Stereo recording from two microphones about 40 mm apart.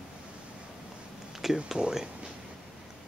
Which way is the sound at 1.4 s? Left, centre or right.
Centre.